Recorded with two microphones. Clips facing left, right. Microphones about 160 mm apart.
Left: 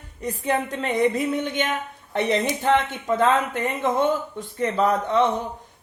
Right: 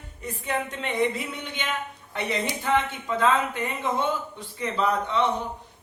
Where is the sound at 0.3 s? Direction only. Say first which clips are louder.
Left 5 dB; 35° left (ahead or behind).